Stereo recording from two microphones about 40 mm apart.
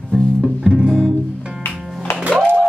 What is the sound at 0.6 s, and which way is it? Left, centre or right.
Music, right.